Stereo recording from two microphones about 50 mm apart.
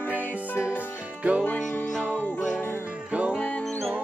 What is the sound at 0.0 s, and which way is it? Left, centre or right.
Music, left.